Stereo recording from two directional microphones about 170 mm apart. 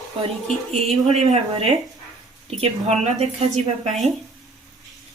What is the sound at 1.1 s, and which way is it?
A woman's voice, 40° right (ahead or behind).